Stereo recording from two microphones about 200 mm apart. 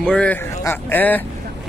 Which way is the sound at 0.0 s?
5° left (ahead or behind).